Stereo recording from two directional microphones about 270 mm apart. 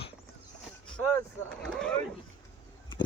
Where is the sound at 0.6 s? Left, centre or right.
Centre.